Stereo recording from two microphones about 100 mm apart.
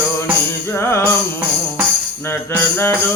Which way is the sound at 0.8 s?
25° left (ahead or behind).